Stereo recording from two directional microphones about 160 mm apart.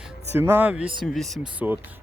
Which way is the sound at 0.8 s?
30° right (ahead or behind).